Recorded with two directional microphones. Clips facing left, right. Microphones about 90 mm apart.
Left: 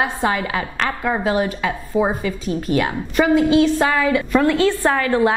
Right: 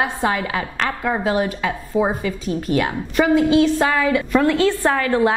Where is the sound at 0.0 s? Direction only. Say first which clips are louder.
Left 1 dB; 20° left (ahead or behind).